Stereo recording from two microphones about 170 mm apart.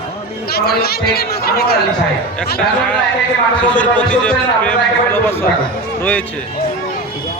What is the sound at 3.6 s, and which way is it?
A man's voice, 10° left (ahead or behind).